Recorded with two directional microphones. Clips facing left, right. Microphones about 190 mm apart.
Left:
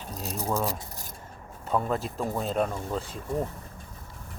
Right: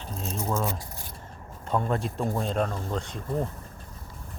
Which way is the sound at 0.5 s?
35° left (ahead or behind).